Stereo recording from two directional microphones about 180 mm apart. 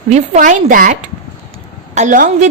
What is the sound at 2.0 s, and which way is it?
Speech, 45° right (ahead or behind).